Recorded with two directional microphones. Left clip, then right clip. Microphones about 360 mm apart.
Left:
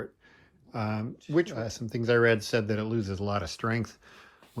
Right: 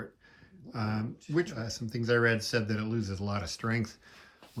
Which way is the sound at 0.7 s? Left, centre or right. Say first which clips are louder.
Left 2 dB; centre.